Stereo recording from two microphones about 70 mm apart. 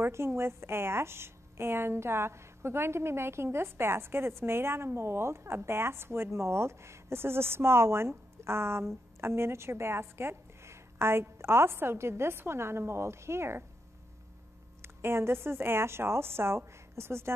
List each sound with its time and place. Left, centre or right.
0.0 s a woman's voice: right
14.8 s a woman's voice: right